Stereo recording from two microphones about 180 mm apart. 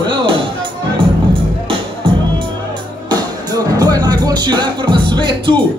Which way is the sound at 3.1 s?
20° right (ahead or behind).